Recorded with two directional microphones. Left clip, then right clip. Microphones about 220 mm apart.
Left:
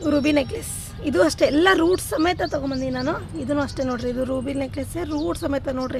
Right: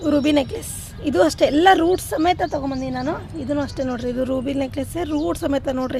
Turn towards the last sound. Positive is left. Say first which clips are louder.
# right 3 dB
turn(degrees=-10)  # may be behind; listen again after turning